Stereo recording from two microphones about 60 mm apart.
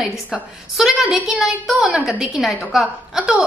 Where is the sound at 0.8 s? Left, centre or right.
Centre.